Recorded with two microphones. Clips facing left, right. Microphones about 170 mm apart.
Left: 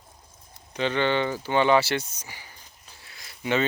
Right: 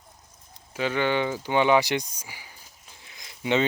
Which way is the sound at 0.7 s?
5° right (ahead or behind).